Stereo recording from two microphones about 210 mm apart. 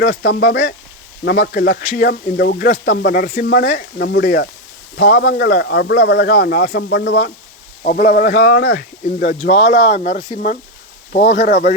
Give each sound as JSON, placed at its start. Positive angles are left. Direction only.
{"t": 0.0, "sound": "speech", "side_deg": 50}
{"t": 7.9, "sound": "speech", "side_deg": 40}
{"t": 8.5, "sound": "speech", "side_deg": 50}